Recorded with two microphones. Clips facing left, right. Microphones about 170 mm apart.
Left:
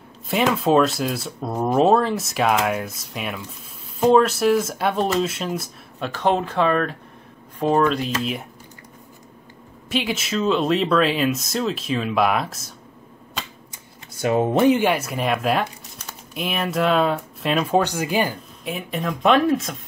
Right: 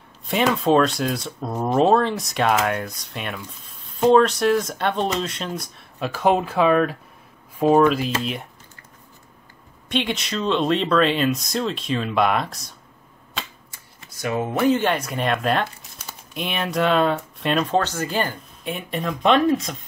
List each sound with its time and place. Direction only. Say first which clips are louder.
0.3 s speech: even; centre (ahead or behind)
9.8 s speech: even; 5° left (ahead or behind)
13.7 s a sound: left 4 dB; 30° left (ahead or behind)
14.7 s speech: left 2 dB; 10° left (ahead or behind)
18.6 s speech: even; centre (ahead or behind)